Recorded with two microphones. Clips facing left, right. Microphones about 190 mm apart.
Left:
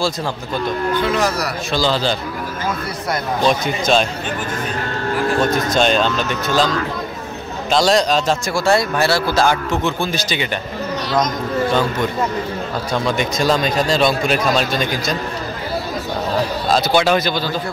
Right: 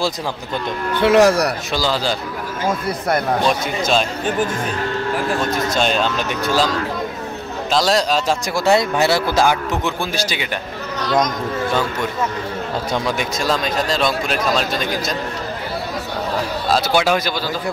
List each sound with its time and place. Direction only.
1.0 s speech: 75° right (ahead or behind)
1.7 s speech: 10° right (ahead or behind)
3.4 s speech: 5° right (ahead or behind)
5.8 s speech: 5° right (ahead or behind)
7.7 s speech: centre (ahead or behind)
8.5 s speech: 20° right (ahead or behind)
12.9 s speech: 10° right (ahead or behind)
16.6 s speech: 5° right (ahead or behind)